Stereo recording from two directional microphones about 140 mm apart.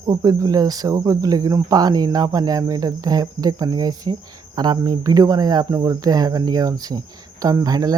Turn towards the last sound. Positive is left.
turn(degrees=-25)  # may be behind; listen again after turning